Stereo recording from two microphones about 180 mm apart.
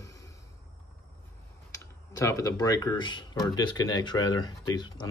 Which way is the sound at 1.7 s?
15° left (ahead or behind).